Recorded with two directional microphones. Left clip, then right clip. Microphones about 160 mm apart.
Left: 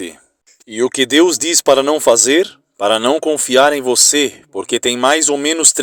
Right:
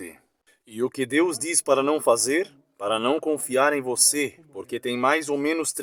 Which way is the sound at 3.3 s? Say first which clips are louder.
Left 10 dB; 30° left (ahead or behind).